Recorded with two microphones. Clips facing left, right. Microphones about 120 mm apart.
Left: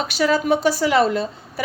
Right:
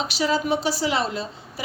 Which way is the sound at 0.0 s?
50° left (ahead or behind).